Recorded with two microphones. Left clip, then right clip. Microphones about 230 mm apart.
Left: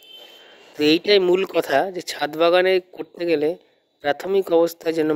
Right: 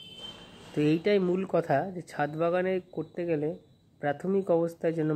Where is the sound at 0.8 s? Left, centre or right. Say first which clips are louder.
Left 10 dB; left.